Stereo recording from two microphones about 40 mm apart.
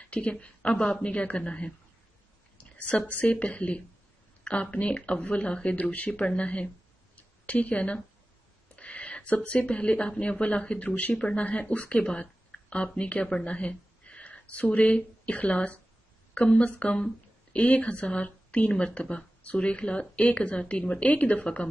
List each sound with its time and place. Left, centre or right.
0.1 s a man's voice: left
3.1 s speech: left
8.7 s a sound: left
9.5 s a man's voice: left
11.4 s a woman's voice: left
16.9 s a sound: left
17.6 s speech: left